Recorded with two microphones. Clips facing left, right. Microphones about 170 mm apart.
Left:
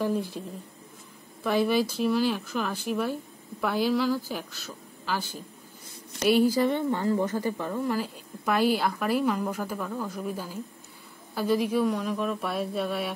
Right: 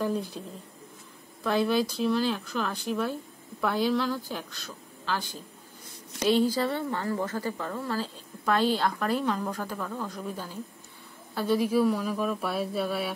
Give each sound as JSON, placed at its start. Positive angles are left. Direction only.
{"t": 0.0, "sound": "speech", "side_deg": 5}
{"t": 1.4, "sound": "a woman's voice", "side_deg": 10}